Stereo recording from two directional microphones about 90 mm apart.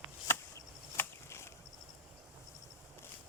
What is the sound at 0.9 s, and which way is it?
Chop, 25° left (ahead or behind).